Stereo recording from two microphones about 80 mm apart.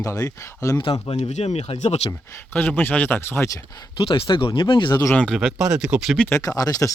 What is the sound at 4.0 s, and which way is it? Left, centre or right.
Speech, left.